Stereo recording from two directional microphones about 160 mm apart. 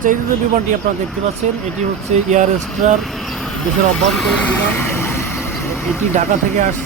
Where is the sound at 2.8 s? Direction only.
45° right (ahead or behind).